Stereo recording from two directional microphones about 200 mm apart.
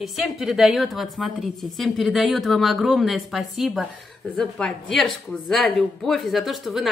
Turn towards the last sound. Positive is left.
turn(degrees=0)  # may be behind; listen again after turning